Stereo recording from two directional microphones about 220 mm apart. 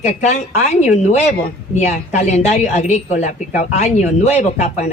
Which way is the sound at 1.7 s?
30° left (ahead or behind).